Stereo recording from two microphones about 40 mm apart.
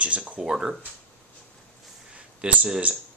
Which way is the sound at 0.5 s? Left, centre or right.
Centre.